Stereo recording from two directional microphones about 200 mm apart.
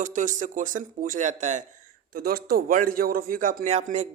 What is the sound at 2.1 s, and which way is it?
A man's voice, 45° right (ahead or behind).